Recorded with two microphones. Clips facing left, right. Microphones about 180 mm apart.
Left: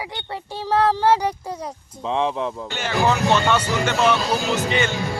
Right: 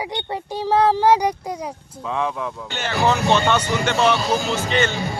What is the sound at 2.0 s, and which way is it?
Speech, 25° left (ahead or behind).